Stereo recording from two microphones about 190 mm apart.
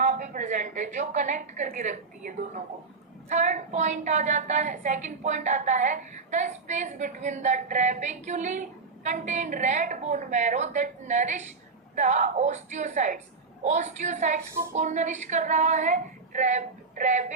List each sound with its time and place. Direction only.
0.0 s a woman's voice: 40° right (ahead or behind)